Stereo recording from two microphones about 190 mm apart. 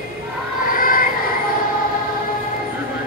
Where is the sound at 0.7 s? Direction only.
45° left (ahead or behind).